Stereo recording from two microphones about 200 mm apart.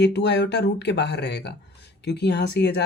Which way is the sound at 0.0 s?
55° left (ahead or behind).